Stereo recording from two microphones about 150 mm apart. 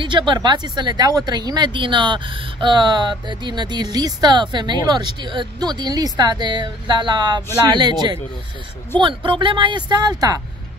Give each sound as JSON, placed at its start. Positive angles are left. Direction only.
{"t": 0.0, "sound": "speech", "side_deg": -35}